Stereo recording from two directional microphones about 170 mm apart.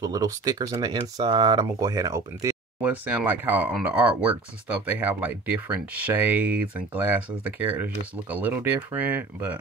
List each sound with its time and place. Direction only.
0.0 s speech: 20° right (ahead or behind)